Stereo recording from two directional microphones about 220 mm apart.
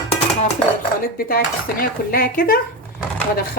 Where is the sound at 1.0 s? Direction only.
40° left (ahead or behind).